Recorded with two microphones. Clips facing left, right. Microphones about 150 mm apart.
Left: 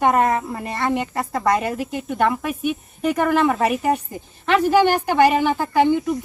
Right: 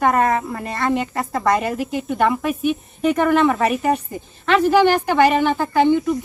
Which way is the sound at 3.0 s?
10° left (ahead or behind).